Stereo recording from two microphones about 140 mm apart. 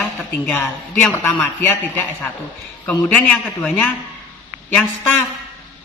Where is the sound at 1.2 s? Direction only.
15° left (ahead or behind).